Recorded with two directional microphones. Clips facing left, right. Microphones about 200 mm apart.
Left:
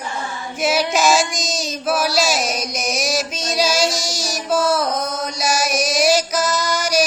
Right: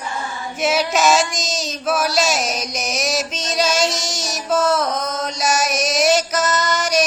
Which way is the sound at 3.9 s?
25° right (ahead or behind).